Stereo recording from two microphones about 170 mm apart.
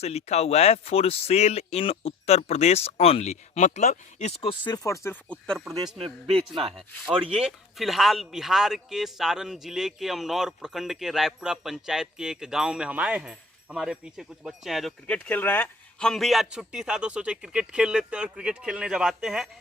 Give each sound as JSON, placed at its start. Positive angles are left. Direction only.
{"t": 0.0, "sound": "speech", "side_deg": 40}
{"t": 5.3, "sound": "speech", "side_deg": 5}
{"t": 5.6, "sound": "a man's voice", "side_deg": -20}
{"t": 6.2, "sound": "speech", "side_deg": 0}
{"t": 6.5, "sound": "speech", "side_deg": -35}
{"t": 7.3, "sound": "speech", "side_deg": 0}